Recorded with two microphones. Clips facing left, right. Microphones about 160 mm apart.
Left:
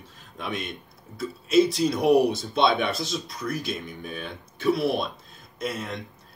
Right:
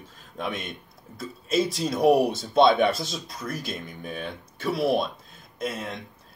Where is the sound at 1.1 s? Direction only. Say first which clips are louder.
Left 5 dB; 50° right (ahead or behind).